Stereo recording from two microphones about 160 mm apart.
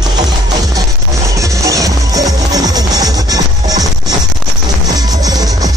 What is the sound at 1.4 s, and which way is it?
Music, 20° right (ahead or behind).